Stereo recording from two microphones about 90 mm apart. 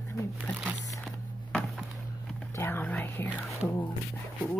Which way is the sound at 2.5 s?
25° left (ahead or behind).